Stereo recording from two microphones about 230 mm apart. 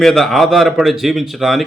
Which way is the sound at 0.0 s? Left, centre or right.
Centre.